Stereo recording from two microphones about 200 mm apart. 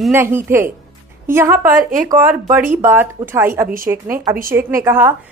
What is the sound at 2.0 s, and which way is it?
A woman's voice, 15° right (ahead or behind).